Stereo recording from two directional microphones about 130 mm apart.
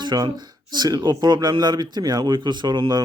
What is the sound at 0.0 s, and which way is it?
Speech, 35° right (ahead or behind).